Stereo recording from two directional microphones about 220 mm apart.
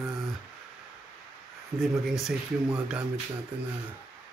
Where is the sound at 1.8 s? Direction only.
Centre (ahead or behind).